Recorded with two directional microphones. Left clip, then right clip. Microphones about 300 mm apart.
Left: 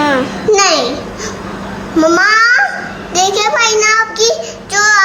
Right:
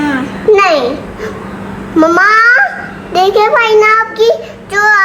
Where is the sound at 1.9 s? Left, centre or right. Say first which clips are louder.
Right 2 dB; centre.